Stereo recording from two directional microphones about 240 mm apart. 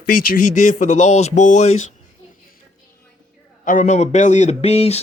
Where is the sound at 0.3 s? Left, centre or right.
Left.